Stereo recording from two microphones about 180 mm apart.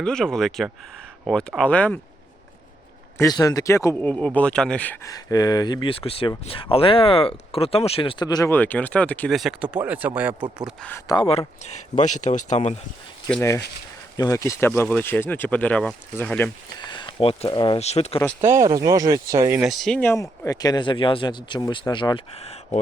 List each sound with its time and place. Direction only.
0.0 s speech: 5° left (ahead or behind)
3.3 s speech: 20° left (ahead or behind)
4.4 s speech: 5° left (ahead or behind)
5.1 s speech: 20° left (ahead or behind); by 10.8 s 5° right (ahead or behind)
10.8 s speech: 15° left (ahead or behind)
11.2 s speech: 35° left (ahead or behind)
13.2 s speech: 15° left (ahead or behind)
16.7 s speech: 25° left (ahead or behind)
18.3 s speech: 15° right (ahead or behind)
19.6 s speech: centre (ahead or behind); by 22.8 s 35° left (ahead or behind)